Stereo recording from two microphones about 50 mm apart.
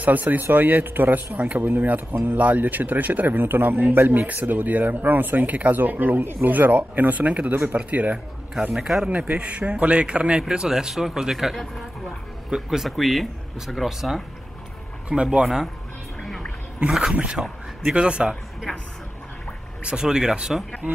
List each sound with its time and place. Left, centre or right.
0.0 s speech: right
8.7 s speech: centre
9.1 s a man's voice: right; by 11.5 s centre
11.5 s speech: centre
12.4 s speech: centre
12.9 s speech: centre
15.2 s speech: centre
17.1 s a man's voice: right
19.8 s speech: centre